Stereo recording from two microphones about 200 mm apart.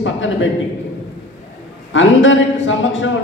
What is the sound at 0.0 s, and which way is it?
Speech, 70° left (ahead or behind).